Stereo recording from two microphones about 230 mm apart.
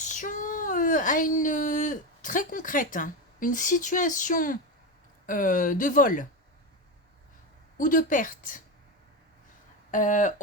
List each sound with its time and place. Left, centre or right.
0.0 s speech: left
7.8 s speech: left
9.9 s speech: left